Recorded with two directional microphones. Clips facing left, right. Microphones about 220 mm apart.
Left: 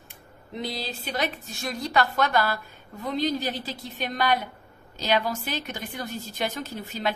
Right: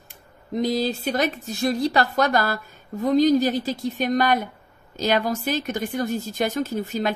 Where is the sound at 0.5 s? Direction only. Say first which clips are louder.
Right 10 dB; 45° right (ahead or behind).